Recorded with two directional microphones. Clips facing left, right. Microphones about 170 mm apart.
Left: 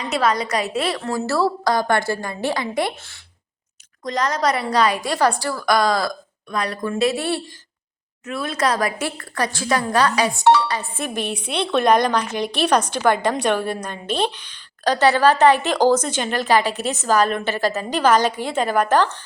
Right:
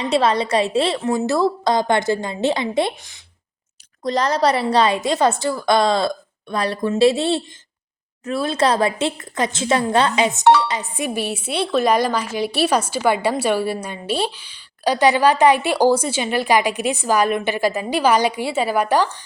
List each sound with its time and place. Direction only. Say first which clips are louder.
0.0 s a woman's voice: right 3 dB; 30° right (ahead or behind)
4.0 s a woman's voice: right 3 dB; 30° right (ahead or behind); by 19.2 s 10° right (ahead or behind)